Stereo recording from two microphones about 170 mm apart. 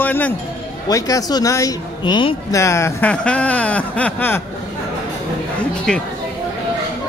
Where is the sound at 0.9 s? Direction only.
20° left (ahead or behind).